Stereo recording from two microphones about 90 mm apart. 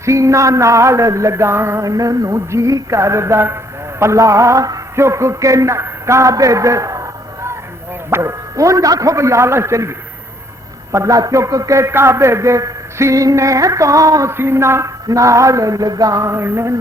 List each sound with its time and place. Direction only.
0.0 s a man's voice: 35° right (ahead or behind)
10.9 s a man's voice: 40° right (ahead or behind)